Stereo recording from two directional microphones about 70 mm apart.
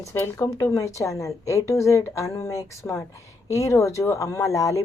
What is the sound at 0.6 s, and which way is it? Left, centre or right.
Speech, left.